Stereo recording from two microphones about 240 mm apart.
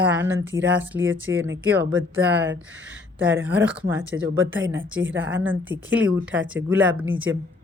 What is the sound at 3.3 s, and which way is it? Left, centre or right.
Speech, centre.